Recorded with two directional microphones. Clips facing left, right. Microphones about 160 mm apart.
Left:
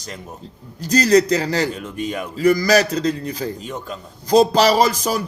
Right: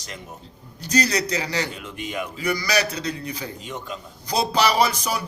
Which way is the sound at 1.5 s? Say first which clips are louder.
Left 6 dB; 40° left (ahead or behind).